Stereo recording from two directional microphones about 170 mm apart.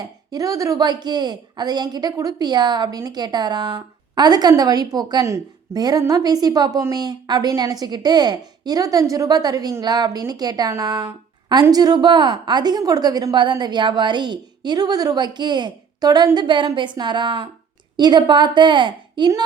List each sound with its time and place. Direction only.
0.0 s speech: 20° right (ahead or behind)